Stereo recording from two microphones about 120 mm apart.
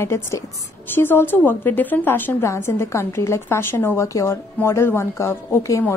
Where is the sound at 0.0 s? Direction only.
20° left (ahead or behind).